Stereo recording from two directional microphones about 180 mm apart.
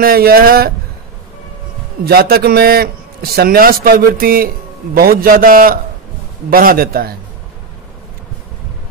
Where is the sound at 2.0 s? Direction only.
60° right (ahead or behind).